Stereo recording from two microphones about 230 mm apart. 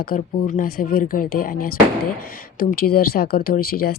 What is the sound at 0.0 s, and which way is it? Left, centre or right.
Speech, left.